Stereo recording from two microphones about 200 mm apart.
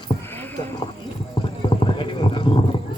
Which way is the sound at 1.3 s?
25° left (ahead or behind).